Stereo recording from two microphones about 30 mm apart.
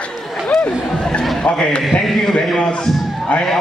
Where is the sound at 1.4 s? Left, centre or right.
Left.